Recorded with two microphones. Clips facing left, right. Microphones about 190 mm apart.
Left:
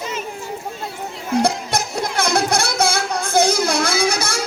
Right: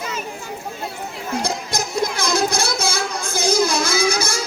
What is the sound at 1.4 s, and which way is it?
Music, 65° left (ahead or behind).